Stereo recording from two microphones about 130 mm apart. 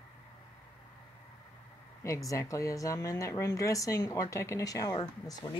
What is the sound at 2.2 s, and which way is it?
Speech, 25° left (ahead or behind).